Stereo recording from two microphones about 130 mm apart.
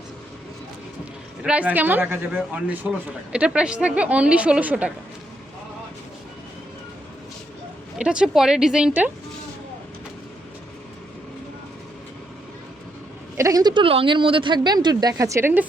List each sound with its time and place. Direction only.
1.4 s a woman's voice: 10° right (ahead or behind)
7.9 s a woman's voice: 5° right (ahead or behind)
13.3 s speech: 25° right (ahead or behind)
13.8 s speech: 45° right (ahead or behind)
15.2 s speech: 20° right (ahead or behind)